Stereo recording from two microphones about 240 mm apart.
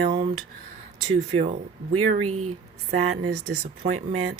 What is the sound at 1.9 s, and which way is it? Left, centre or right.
Speech, right.